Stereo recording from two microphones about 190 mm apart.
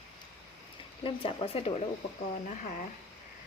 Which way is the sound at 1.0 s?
30° left (ahead or behind).